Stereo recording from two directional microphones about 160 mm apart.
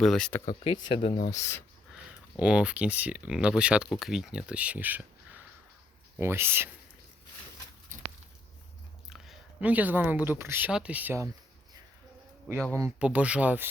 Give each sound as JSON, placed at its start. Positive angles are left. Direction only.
{"t": 0.0, "sound": "speech", "side_deg": 5}
{"t": 0.4, "sound": "speech", "side_deg": 30}
{"t": 1.3, "sound": "speech", "side_deg": 15}
{"t": 2.4, "sound": "speech", "side_deg": -5}
{"t": 9.0, "sound": "speech", "side_deg": 0}
{"t": 12.5, "sound": "speech", "side_deg": -15}